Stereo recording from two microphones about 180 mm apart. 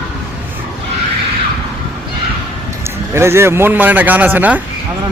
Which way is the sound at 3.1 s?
15° right (ahead or behind).